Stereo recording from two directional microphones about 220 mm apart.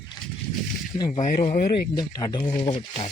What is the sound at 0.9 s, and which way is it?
Speech, 20° left (ahead or behind).